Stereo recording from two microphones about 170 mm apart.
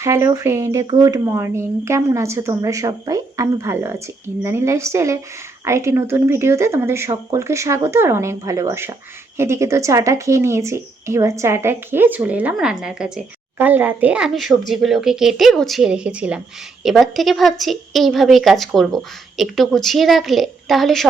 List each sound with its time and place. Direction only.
0.0 s a woman's voice: 15° right (ahead or behind); by 21.1 s centre (ahead or behind)